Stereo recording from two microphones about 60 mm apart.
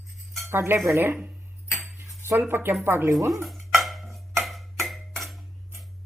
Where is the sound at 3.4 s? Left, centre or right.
Centre.